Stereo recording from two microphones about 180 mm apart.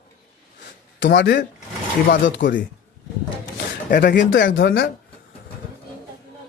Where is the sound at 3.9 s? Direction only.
50° left (ahead or behind).